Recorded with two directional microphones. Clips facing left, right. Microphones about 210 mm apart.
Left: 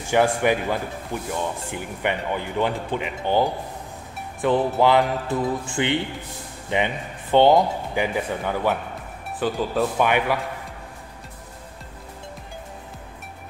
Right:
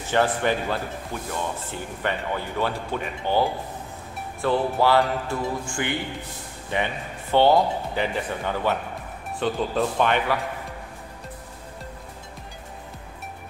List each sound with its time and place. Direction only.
0.0 s speech: 10° left (ahead or behind)